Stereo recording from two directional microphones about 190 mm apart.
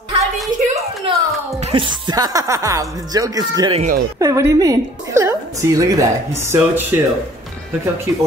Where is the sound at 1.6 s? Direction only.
25° right (ahead or behind).